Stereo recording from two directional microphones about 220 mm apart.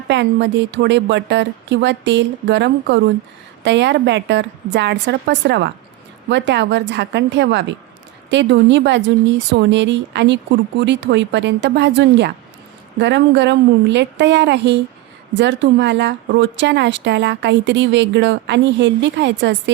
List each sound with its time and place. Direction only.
0.1 s a woman's voice: 50° right (ahead or behind)